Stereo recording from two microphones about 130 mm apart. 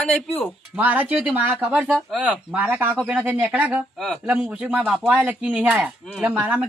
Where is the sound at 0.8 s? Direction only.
10° right (ahead or behind).